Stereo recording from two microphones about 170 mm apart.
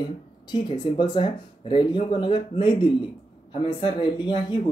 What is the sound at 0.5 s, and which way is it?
Speech, 25° left (ahead or behind).